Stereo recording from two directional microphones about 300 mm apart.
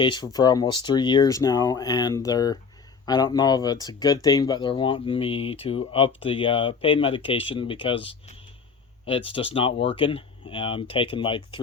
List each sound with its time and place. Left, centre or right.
0.0 s speech: centre